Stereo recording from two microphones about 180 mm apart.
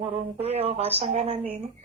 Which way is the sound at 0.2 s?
35° right (ahead or behind).